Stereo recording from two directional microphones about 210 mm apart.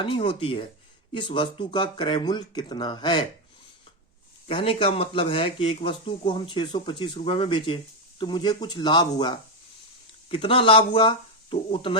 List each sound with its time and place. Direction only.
0.0 s speech: 25° left (ahead or behind)
4.4 s speech: 25° left (ahead or behind)